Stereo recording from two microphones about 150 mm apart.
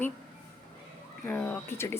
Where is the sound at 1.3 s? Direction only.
10° left (ahead or behind).